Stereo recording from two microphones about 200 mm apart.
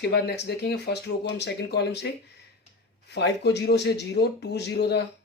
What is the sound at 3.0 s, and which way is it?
Speech, 55° left (ahead or behind).